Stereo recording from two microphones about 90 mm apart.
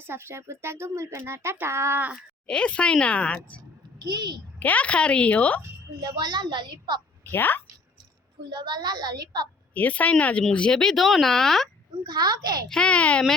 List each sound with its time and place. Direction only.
0.0 s speech: 25° right (ahead or behind)
2.5 s a woman's voice: 10° left (ahead or behind)
3.9 s a child's voice: 55° right (ahead or behind)
4.6 s a woman's voice: 15° left (ahead or behind)
6.0 s a child's voice: 50° right (ahead or behind)
7.3 s speech: 20° left (ahead or behind)
8.4 s a woman's voice: 55° right (ahead or behind)
9.7 s a woman's voice: 15° left (ahead or behind)
12.0 s a woman's voice: 50° right (ahead or behind)
12.6 s a woman's voice: 10° left (ahead or behind)